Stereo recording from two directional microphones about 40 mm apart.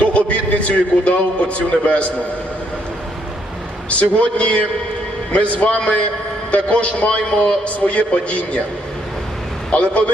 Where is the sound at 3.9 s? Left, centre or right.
Left.